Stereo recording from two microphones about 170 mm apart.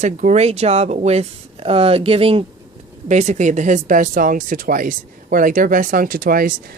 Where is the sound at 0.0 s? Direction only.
45° right (ahead or behind).